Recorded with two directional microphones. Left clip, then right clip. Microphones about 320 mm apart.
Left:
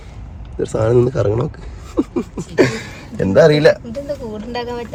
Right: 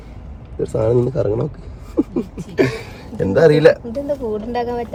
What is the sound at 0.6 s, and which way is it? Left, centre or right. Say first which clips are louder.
Speech: left 2 dB; left.